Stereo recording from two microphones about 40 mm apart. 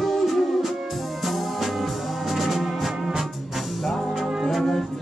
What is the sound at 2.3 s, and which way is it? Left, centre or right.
Music, centre.